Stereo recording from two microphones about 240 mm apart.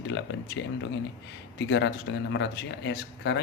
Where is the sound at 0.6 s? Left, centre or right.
Left.